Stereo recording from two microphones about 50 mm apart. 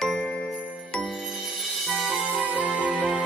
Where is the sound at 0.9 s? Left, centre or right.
Centre.